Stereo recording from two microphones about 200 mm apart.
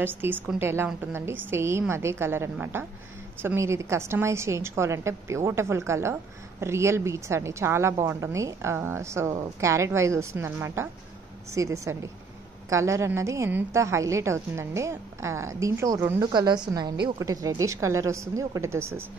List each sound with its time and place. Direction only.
0.0 s a woman's voice: 10° right (ahead or behind)